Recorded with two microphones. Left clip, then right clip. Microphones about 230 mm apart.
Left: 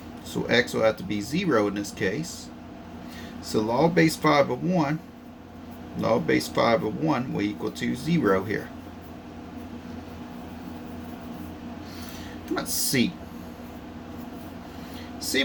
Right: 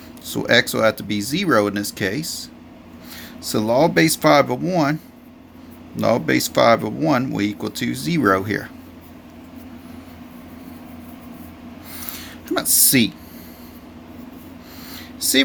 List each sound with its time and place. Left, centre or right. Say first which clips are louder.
0.3 s speech: right 7 dB; right
3.4 s speech: right 6 dB; right
6.0 s speech: right 5 dB; right
12.5 s a sound: right 8 dB; right